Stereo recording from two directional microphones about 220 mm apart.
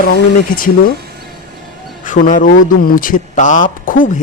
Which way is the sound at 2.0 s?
35° left (ahead or behind).